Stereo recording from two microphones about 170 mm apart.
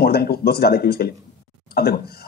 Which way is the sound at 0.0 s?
65° left (ahead or behind).